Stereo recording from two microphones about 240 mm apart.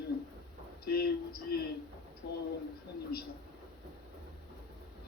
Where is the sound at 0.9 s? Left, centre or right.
Left.